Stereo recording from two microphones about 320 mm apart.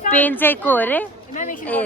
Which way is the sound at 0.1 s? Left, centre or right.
Centre.